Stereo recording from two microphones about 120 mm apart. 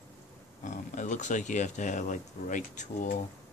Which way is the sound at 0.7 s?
90° left.